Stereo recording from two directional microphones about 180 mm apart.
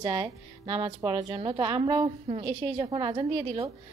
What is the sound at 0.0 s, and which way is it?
A woman's voice, 25° right (ahead or behind).